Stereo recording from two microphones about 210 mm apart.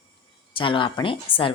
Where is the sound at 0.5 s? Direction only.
25° left (ahead or behind).